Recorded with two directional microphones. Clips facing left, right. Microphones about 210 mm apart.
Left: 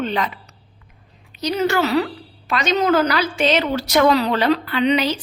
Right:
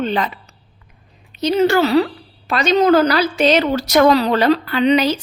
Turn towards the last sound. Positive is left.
turn(degrees=-40)  # may be behind; listen again after turning